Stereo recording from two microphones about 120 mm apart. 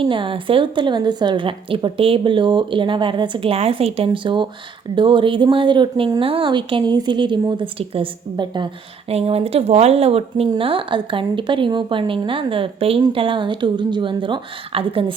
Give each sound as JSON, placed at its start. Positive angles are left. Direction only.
{"t": 0.0, "sound": "a woman's voice", "side_deg": -45}
{"t": 9.0, "sound": "a woman's voice", "side_deg": -55}